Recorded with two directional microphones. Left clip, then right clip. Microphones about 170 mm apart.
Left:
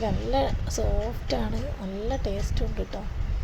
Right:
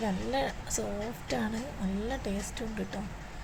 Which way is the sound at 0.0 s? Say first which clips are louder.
Left 5 dB; 10° left (ahead or behind).